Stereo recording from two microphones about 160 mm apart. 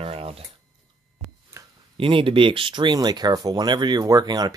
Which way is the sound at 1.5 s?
15° right (ahead or behind).